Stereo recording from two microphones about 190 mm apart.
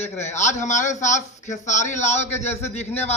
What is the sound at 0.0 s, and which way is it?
A man's voice, 35° left (ahead or behind).